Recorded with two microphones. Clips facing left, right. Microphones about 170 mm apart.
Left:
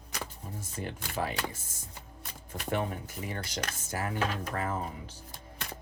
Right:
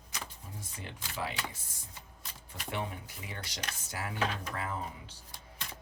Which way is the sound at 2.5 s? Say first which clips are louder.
Left 6 dB; 45° left (ahead or behind).